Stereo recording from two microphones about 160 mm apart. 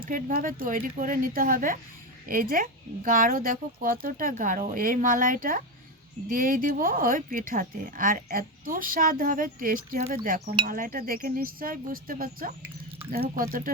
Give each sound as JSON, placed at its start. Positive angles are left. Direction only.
{"t": 0.1, "sound": "a woman's voice", "side_deg": -60}